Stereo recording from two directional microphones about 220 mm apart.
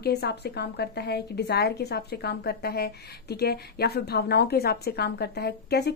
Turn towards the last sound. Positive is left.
turn(degrees=45)  # may be behind; listen again after turning